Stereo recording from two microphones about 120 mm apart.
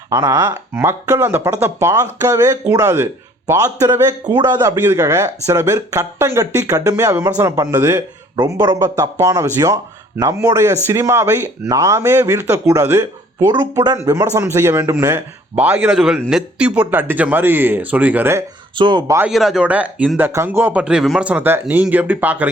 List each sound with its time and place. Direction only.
0.1 s speech: 25° right (ahead or behind)
4.8 s speech: 20° right (ahead or behind)
8.4 s speech: 35° right (ahead or behind)
13.5 s speech: 35° right (ahead or behind); by 18.4 s 20° right (ahead or behind)
18.8 s speech: 35° right (ahead or behind)
19.3 s speech: centre (ahead or behind)